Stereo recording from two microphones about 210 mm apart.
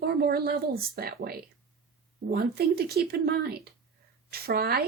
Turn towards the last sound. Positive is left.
turn(degrees=-45)  # may be behind; listen again after turning